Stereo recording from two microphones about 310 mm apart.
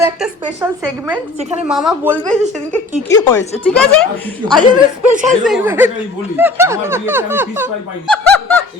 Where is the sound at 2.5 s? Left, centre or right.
Right.